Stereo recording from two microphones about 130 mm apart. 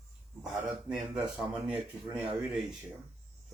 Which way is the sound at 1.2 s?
10° right (ahead or behind).